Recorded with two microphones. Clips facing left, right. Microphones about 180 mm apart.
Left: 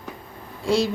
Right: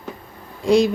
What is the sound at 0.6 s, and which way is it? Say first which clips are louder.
Speech: right 6 dB; 15° right (ahead or behind).